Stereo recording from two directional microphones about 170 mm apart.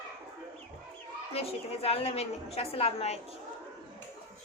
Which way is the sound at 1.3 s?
35° left (ahead or behind).